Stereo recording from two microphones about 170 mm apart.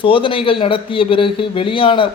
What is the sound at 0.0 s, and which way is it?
A man's voice, 30° left (ahead or behind).